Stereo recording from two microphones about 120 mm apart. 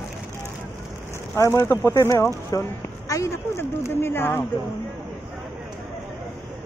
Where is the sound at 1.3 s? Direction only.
20° left (ahead or behind).